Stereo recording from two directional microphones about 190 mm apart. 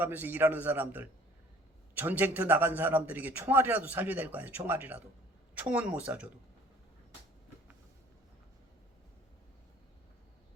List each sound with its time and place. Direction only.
0.0 s a man's voice: 10° right (ahead or behind)